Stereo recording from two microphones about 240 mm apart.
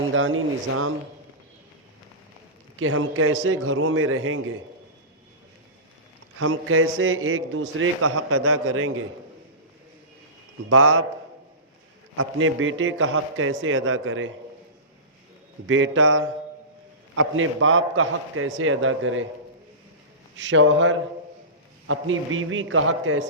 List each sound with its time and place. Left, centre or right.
0.1 s a man's voice: right
2.7 s a man's voice: right
6.4 s a man's voice: right
10.7 s a man's voice: right
12.1 s a man's voice: right
15.6 s a man's voice: right
20.4 s a man's voice: right